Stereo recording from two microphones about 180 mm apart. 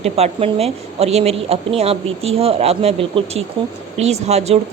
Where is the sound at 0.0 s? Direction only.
35° right (ahead or behind).